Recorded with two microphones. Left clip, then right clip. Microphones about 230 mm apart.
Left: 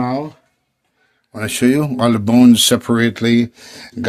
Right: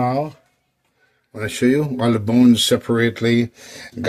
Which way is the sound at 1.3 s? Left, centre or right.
Left.